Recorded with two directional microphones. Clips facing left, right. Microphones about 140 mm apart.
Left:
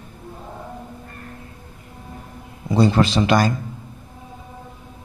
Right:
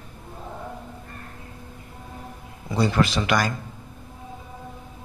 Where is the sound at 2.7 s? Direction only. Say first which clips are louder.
Left 5 dB; 25° left (ahead or behind).